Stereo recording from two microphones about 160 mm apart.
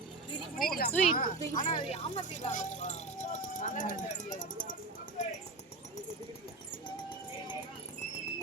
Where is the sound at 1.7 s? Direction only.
35° left (ahead or behind); by 4.7 s 55° left (ahead or behind).